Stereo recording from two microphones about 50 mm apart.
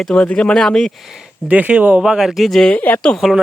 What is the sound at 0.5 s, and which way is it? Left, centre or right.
Speech, centre.